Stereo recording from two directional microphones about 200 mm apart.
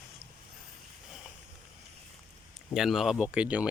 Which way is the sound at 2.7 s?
Centre (ahead or behind).